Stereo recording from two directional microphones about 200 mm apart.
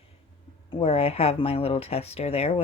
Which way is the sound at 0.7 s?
30° left (ahead or behind).